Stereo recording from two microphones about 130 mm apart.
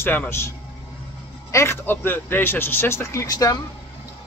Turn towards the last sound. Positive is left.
turn(degrees=30)  # may be behind; listen again after turning